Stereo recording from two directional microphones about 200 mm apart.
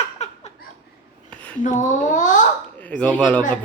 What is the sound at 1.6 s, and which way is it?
Speech, 40° left (ahead or behind).